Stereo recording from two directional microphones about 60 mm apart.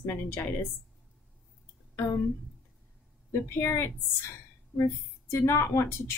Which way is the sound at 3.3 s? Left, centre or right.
Left.